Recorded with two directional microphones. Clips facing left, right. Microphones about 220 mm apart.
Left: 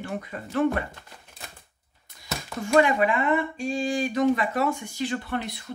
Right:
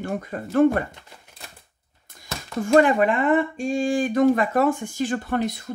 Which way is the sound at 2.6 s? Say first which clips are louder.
Right 4 dB; 50° right (ahead or behind).